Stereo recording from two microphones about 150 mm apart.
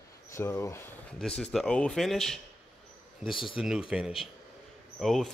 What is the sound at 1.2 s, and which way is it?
Speech, 5° left (ahead or behind).